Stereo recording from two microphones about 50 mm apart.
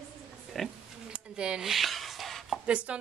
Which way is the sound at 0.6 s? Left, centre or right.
Centre.